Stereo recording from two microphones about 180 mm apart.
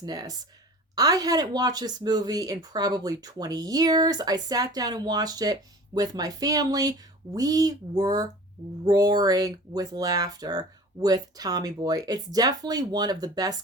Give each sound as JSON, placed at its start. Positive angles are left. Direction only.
{"t": 0.0, "sound": "speech", "side_deg": -20}